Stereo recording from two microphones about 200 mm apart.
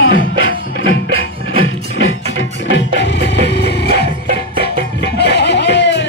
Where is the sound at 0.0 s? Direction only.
85° left.